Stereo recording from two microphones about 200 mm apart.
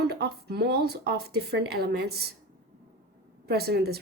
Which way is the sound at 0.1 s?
55° right (ahead or behind).